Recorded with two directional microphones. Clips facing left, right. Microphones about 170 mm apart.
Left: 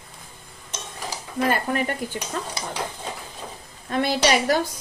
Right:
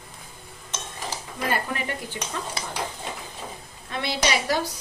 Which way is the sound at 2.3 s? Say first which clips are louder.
Left 2 dB; 45° left (ahead or behind).